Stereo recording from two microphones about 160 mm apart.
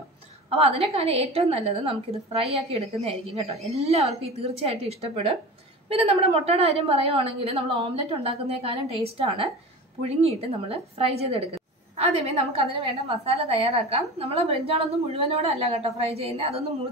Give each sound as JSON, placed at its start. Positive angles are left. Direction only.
{"t": 0.5, "sound": "a woman's voice", "side_deg": -40}